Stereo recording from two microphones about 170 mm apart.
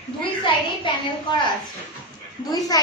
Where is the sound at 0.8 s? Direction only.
25° left (ahead or behind).